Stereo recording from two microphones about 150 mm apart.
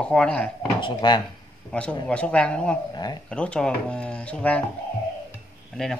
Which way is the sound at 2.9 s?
25° left (ahead or behind).